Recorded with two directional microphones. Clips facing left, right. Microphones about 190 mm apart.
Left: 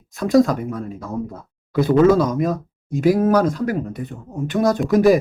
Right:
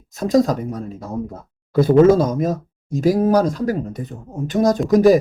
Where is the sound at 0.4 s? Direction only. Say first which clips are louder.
Right 1 dB; 40° right (ahead or behind).